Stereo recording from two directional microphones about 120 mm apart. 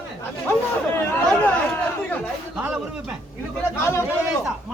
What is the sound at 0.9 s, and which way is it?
Chatter, 15° left (ahead or behind).